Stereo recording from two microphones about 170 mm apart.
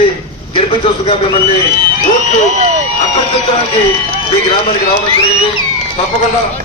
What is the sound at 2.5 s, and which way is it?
Speech, 45° right (ahead or behind).